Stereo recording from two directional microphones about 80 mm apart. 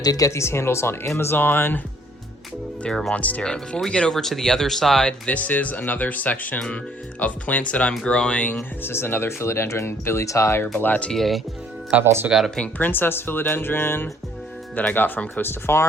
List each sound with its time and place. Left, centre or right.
0.0 s speech: left
0.3 s speech: left
2.8 s speech: centre
5.2 s speech: centre
8.8 s speech: left
10.8 s speech: left
11.1 s speech: centre
12.0 s speech: right
12.5 s speech: centre